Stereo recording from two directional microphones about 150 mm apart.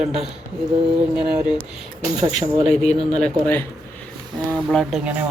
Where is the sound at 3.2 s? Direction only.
10° left (ahead or behind).